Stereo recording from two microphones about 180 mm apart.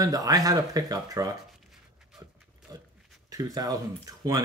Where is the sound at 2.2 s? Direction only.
20° right (ahead or behind).